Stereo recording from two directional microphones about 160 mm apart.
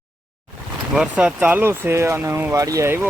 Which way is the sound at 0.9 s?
5° right (ahead or behind).